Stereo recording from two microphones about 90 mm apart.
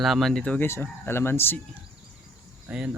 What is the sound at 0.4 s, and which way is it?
Speech, 15° left (ahead or behind).